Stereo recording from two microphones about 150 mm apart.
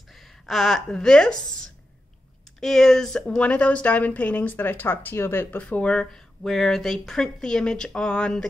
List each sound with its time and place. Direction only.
0.1 s a woman's voice: centre (ahead or behind)
2.6 s speech: centre (ahead or behind)